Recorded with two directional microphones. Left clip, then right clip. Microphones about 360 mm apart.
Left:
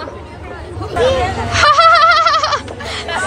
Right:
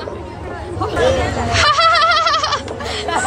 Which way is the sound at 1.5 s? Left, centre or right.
Centre.